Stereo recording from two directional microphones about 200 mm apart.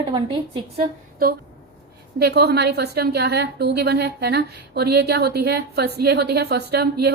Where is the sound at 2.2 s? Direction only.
55° right (ahead or behind).